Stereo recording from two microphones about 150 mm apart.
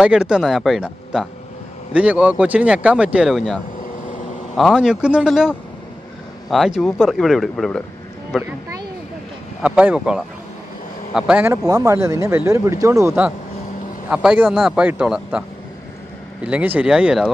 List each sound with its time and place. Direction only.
0.0 s speech: 5° right (ahead or behind)
6.5 s speech: centre (ahead or behind)
9.6 s speech: 10° right (ahead or behind)
11.5 s speech: 25° right (ahead or behind)
14.0 s speech: 5° right (ahead or behind)
16.4 s speech: 10° right (ahead or behind)